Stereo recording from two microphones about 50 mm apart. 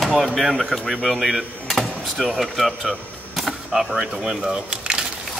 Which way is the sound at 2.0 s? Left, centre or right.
Centre.